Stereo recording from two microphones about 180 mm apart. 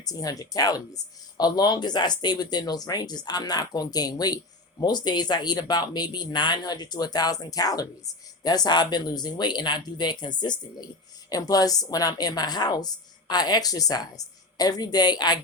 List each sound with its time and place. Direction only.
0.0 s speech: 20° left (ahead or behind)